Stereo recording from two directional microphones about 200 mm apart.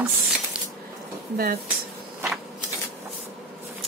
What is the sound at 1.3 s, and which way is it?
Speech, 50° right (ahead or behind).